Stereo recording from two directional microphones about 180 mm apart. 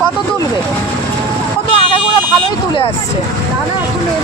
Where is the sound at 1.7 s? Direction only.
30° left (ahead or behind).